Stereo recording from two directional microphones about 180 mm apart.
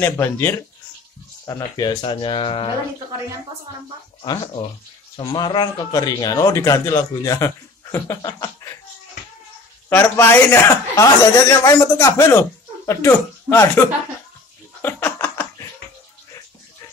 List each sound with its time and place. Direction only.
0.0 s speech: 15° left (ahead or behind)
5.1 s speech: 25° left (ahead or behind)
9.8 s speech: 10° left (ahead or behind)
14.8 s laughter: 10° left (ahead or behind)